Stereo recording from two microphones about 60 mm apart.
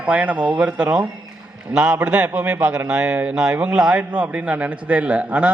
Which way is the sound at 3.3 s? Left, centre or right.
Centre.